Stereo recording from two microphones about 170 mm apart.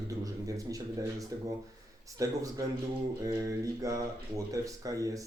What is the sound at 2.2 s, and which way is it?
Speech, 20° right (ahead or behind).